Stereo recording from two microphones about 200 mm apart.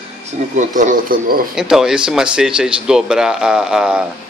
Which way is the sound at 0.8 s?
45° right (ahead or behind).